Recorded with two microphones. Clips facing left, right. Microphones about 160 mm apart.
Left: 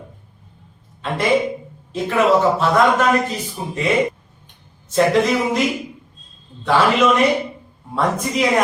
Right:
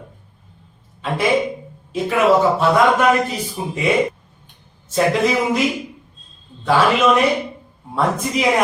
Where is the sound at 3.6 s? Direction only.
5° right (ahead or behind).